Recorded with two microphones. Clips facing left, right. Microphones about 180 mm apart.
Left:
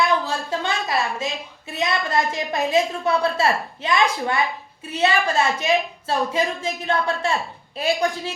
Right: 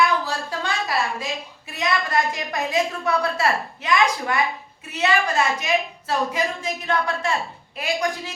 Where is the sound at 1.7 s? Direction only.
25° left (ahead or behind).